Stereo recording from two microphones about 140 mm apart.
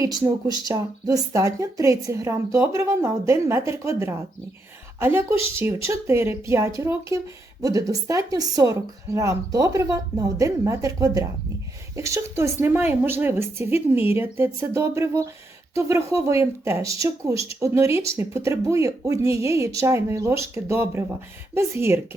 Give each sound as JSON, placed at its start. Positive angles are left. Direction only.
{"t": 0.0, "sound": "a woman's voice", "side_deg": -25}